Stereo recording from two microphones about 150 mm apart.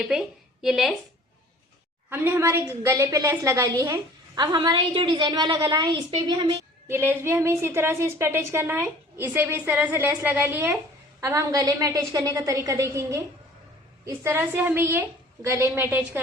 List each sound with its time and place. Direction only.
0.1 s a woman's voice: centre (ahead or behind)
2.0 s a woman's voice: 15° right (ahead or behind)
4.5 s a woman's voice: 35° right (ahead or behind)
6.8 s a woman's voice: 15° right (ahead or behind)